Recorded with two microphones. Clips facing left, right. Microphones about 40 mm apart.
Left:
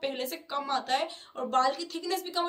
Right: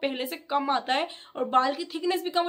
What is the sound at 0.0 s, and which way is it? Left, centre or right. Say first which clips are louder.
Speech: right 3 dB; right.